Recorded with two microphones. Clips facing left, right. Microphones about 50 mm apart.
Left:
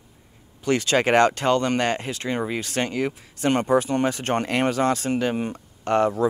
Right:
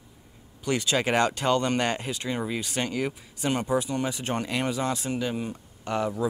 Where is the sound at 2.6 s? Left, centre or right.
Left.